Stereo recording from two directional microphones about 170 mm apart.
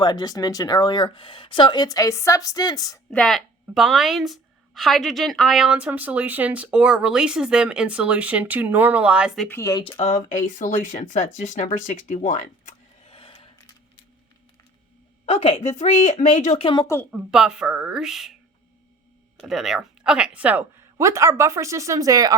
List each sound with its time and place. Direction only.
0.0 s speech: 25° left (ahead or behind)
3.1 s a woman's voice: 5° left (ahead or behind)
9.5 s speech: 15° left (ahead or behind)
10.0 s speech: 40° left (ahead or behind)
13.1 s a sound: 30° left (ahead or behind)
15.3 s a woman's voice: 40° left (ahead or behind)
16.8 s speech: 15° left (ahead or behind)
17.1 s a woman's voice: centre (ahead or behind)
19.4 s speech: centre (ahead or behind); by 22.4 s 20° right (ahead or behind)